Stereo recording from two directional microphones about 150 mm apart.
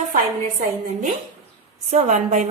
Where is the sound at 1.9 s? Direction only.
50° right (ahead or behind).